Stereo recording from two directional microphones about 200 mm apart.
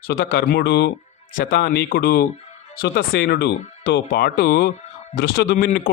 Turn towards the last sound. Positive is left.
turn(degrees=50)  # may be behind; listen again after turning